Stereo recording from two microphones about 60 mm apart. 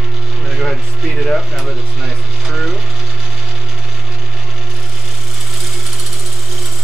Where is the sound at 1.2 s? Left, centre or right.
Centre.